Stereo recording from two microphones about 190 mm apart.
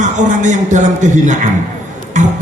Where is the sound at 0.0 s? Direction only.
40° right (ahead or behind).